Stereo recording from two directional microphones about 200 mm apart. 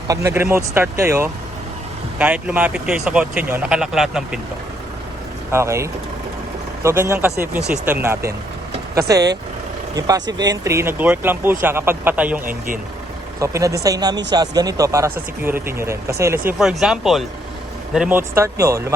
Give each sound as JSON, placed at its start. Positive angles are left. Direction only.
{"t": 0.1, "sound": "speech", "side_deg": -15}
{"t": 5.5, "sound": "speech", "side_deg": -15}
{"t": 12.5, "sound": "speech", "side_deg": -40}
{"t": 13.4, "sound": "speech", "side_deg": -15}
{"t": 16.5, "sound": "speech", "side_deg": 0}